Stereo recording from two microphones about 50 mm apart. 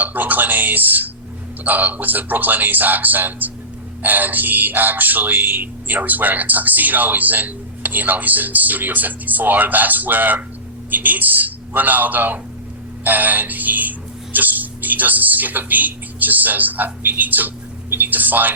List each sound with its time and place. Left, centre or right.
0.0 s speech: right
13.1 s music: right
14.3 s speech: right